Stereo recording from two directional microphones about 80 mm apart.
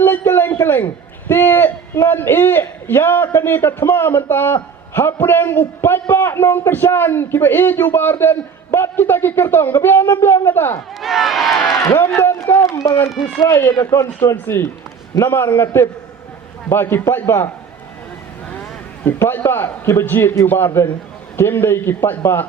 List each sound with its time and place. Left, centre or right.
0.0 s a sound: left
1.3 s a man's voice: left
11.0 s speech: centre
11.6 s a man's voice: left
11.9 s a man's voice: left
12.6 s a man's voice: left
19.0 s a man's voice: left